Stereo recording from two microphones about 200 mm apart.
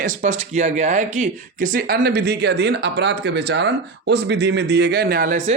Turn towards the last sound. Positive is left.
turn(degrees=-45)  # may be behind; listen again after turning